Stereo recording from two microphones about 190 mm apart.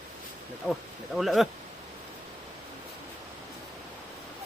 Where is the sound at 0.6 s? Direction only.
5° left (ahead or behind).